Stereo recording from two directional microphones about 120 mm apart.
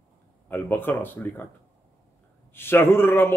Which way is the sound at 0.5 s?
15° left (ahead or behind).